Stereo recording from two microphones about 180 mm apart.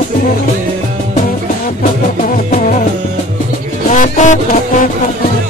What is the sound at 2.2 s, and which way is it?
Music, 45° left (ahead or behind).